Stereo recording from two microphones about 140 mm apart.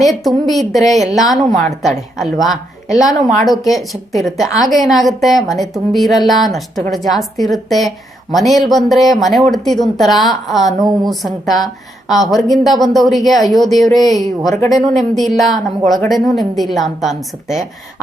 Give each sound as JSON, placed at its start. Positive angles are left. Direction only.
{"t": 0.0, "sound": "a woman's voice", "side_deg": 0}
{"t": 10.8, "sound": "a woman's voice", "side_deg": -30}
{"t": 11.1, "sound": "a woman's voice", "side_deg": 0}
{"t": 14.3, "sound": "speech", "side_deg": 25}
{"t": 14.7, "sound": "a woman's voice", "side_deg": 0}